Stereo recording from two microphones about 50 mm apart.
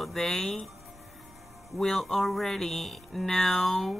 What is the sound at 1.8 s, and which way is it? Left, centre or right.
Music, centre.